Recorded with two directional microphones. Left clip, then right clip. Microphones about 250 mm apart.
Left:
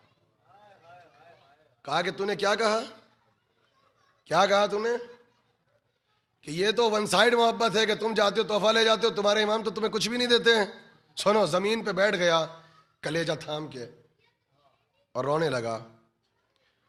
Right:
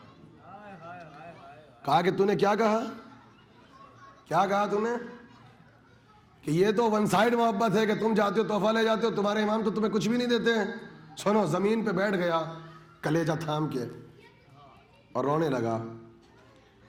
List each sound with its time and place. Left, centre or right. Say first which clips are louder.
1.8 s a man's voice: right 4 dB; right
4.3 s a man's voice: left 3 dB; centre
6.4 s a man's voice: even; centre
13.0 s a man's voice: right 1 dB; centre
15.1 s a man's voice: left 1 dB; centre